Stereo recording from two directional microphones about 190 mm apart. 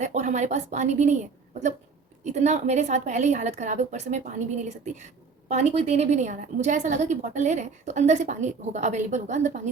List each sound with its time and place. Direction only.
0.0 s a woman's voice: 40° right (ahead or behind)
2.2 s a woman's voice: 35° right (ahead or behind)